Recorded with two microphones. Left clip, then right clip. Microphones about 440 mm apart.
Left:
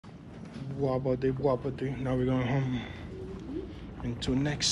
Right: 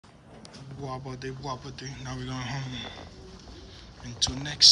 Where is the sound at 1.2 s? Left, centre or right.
Centre.